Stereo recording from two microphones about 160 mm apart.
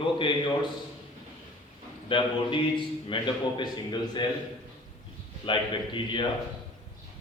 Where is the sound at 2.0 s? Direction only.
30° left (ahead or behind).